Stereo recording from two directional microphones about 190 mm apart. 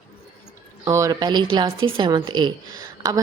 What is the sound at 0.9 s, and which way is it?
Speech, 15° right (ahead or behind).